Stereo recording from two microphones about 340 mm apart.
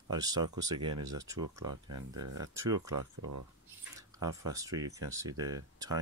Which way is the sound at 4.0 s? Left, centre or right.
Centre.